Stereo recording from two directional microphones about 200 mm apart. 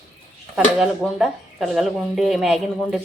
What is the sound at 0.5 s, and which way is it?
Speech, centre (ahead or behind).